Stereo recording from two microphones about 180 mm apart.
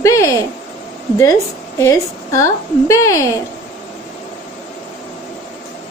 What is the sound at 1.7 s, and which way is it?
A woman's voice, 15° left (ahead or behind).